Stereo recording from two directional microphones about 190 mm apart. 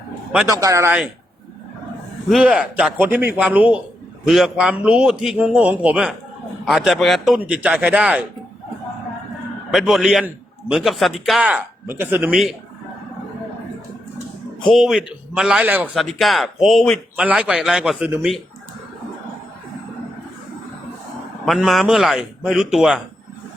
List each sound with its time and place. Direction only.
0.4 s a man's voice: 15° right (ahead or behind)
2.3 s a man's voice: 5° right (ahead or behind)
9.7 s a man's voice: centre (ahead or behind)
14.6 s a man's voice: centre (ahead or behind)
21.4 s a man's voice: centre (ahead or behind)